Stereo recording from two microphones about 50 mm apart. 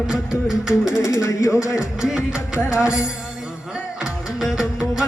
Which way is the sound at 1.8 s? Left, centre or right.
Centre.